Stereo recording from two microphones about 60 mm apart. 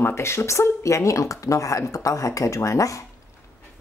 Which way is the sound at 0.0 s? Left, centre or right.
Left.